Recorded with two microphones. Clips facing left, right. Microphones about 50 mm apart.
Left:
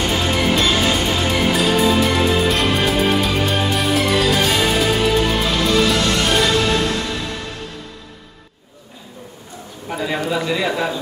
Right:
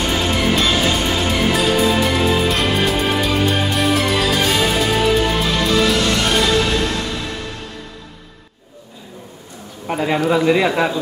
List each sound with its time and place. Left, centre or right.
0.0 s music: centre
9.8 s a sound: right
10.3 s speech: right